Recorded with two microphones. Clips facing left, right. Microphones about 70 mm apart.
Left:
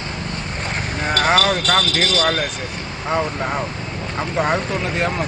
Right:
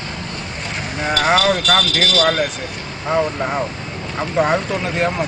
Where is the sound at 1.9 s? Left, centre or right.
Left.